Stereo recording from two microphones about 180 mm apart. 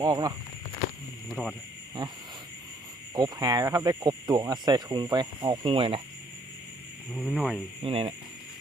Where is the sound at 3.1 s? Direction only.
20° right (ahead or behind).